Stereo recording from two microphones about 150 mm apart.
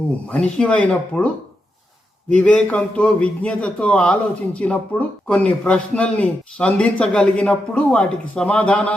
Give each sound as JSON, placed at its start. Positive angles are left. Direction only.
{"t": 0.3, "sound": "a man's voice", "side_deg": 10}
{"t": 2.3, "sound": "a man's voice", "side_deg": 10}